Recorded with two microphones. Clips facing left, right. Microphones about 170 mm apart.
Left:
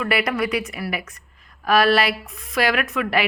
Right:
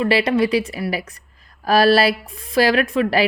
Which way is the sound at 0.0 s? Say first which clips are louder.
Right 5 dB; 30° right (ahead or behind).